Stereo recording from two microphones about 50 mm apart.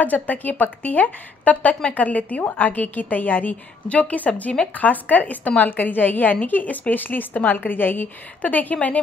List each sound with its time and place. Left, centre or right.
0.0 s a woman's voice: left